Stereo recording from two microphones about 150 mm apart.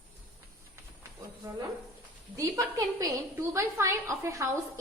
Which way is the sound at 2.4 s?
25° right (ahead or behind).